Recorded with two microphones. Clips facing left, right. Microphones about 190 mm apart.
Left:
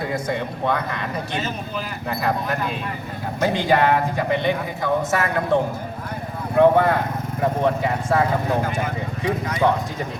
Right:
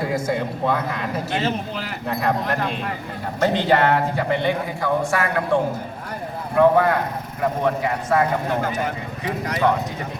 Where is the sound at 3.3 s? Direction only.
10° left (ahead or behind).